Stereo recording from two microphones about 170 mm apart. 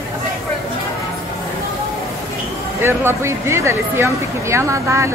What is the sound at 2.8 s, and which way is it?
Speech, 15° right (ahead or behind).